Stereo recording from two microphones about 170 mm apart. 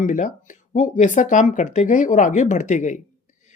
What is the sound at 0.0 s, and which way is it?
Speech, 50° left (ahead or behind).